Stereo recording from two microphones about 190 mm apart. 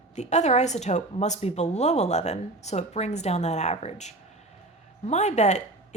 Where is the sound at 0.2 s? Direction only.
35° left (ahead or behind).